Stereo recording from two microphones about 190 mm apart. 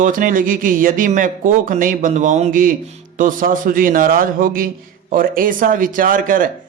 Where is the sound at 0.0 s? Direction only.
45° right (ahead or behind).